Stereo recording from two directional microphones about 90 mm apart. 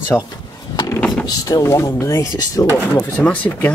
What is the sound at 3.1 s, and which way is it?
Speech, 15° left (ahead or behind).